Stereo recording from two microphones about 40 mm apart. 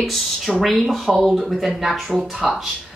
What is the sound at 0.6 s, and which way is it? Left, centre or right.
A woman's voice, centre.